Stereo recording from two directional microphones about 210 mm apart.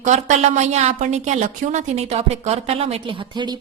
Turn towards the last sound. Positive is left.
turn(degrees=-20)  # may be behind; listen again after turning